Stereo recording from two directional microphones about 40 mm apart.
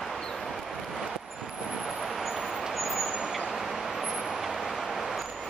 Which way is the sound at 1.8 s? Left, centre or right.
Centre.